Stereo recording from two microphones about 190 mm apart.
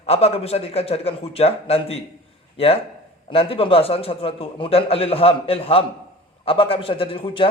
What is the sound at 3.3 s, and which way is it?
A man's voice, 30° left (ahead or behind).